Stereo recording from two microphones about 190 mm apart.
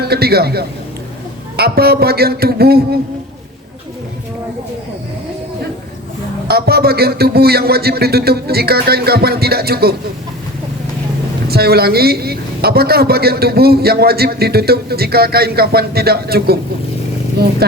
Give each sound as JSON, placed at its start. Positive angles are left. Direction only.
{"t": 0.0, "sound": "a woman's voice", "side_deg": -55}
{"t": 6.5, "sound": "a woman's voice", "side_deg": -55}
{"t": 11.4, "sound": "a woman's voice", "side_deg": -55}
{"t": 17.6, "sound": "a woman's voice", "side_deg": -55}